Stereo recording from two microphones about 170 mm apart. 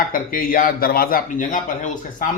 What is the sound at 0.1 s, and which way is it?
A man's voice, 55° left (ahead or behind).